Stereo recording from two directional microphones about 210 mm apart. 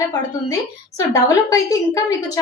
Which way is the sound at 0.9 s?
15° left (ahead or behind).